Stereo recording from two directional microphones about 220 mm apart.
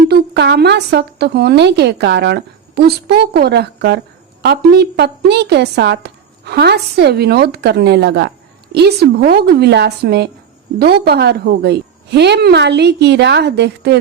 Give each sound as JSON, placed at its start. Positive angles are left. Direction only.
{"t": 0.0, "sound": "speech", "side_deg": -50}